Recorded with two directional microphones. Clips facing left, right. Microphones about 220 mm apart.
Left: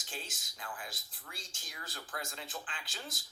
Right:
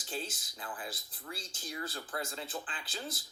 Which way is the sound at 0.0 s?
35° right (ahead or behind).